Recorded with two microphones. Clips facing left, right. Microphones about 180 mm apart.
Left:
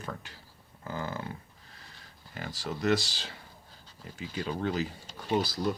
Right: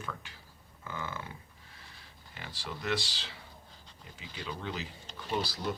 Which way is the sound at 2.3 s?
45° left (ahead or behind).